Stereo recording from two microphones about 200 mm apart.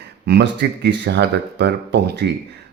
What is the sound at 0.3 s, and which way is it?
A man's voice, 55° right (ahead or behind).